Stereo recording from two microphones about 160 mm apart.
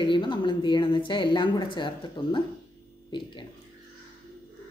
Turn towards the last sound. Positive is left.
turn(degrees=30)  # may be behind; listen again after turning